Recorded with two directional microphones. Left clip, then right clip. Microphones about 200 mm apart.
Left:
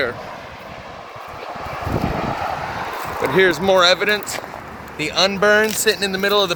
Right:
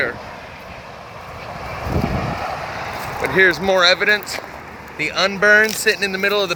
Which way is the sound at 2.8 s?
40° right (ahead or behind).